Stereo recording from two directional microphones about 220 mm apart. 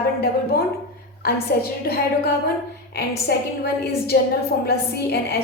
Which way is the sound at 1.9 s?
45° left (ahead or behind).